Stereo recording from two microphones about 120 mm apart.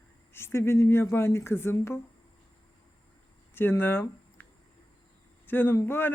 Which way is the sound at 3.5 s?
20° left (ahead or behind).